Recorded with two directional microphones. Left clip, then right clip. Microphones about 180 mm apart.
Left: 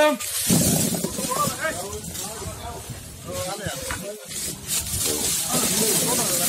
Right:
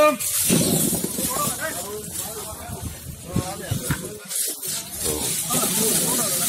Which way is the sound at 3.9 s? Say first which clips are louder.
Right 1 dB; 40° right (ahead or behind).